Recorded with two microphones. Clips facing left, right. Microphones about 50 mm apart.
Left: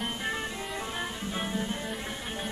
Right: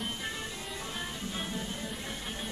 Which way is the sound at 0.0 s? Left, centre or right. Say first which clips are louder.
Left 5 dB; left.